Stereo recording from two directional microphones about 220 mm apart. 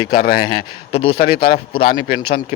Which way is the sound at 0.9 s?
25° left (ahead or behind).